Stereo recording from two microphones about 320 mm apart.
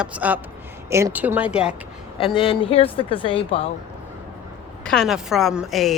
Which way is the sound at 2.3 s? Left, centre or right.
Centre.